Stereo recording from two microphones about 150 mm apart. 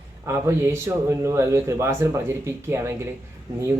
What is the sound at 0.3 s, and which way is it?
A man's voice, 20° right (ahead or behind).